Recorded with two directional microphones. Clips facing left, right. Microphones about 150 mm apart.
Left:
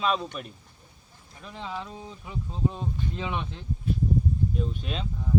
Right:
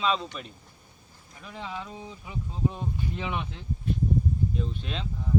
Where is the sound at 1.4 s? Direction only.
5° right (ahead or behind).